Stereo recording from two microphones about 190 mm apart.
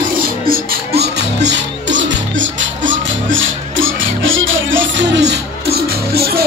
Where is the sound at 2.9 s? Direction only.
90° right; by 6.4 s 55° right (ahead or behind).